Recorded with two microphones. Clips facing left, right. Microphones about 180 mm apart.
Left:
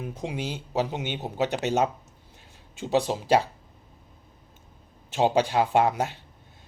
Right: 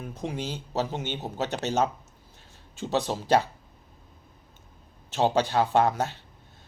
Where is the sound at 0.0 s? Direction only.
15° left (ahead or behind).